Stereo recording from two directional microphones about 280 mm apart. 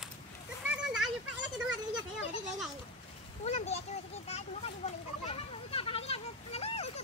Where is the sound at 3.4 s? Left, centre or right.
Left.